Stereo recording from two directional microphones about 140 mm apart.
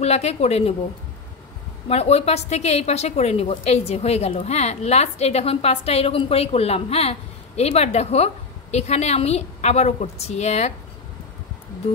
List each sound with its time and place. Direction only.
0.0 s a woman's voice: 50° left (ahead or behind)
1.9 s a woman's voice: 50° left (ahead or behind)